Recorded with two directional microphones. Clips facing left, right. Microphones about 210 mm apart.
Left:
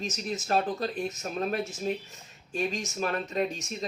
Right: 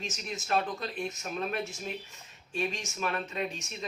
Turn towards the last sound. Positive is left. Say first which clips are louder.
# left 5 dB
turn(degrees=40)  # may be behind; listen again after turning